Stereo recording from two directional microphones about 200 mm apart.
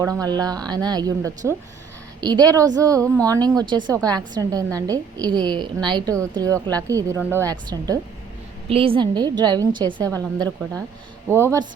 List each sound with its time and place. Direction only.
0.0 s a woman's voice: 15° right (ahead or behind)